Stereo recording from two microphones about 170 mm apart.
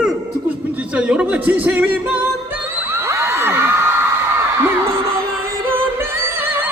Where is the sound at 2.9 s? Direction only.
15° right (ahead or behind).